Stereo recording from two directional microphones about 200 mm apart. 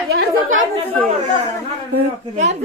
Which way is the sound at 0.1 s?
55° right (ahead or behind).